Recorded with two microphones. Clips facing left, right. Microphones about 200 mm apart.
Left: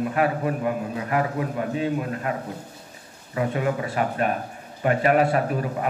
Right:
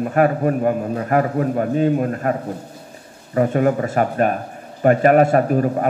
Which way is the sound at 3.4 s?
45° right (ahead or behind).